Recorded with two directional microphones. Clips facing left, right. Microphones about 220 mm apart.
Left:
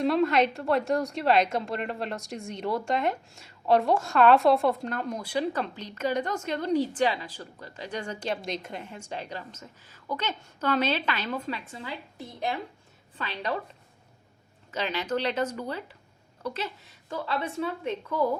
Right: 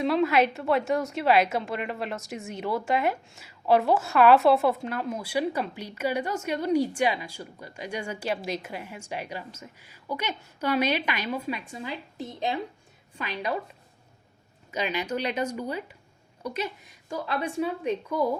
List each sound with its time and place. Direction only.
0.0 s a woman's voice: centre (ahead or behind)
14.7 s a woman's voice: 15° right (ahead or behind)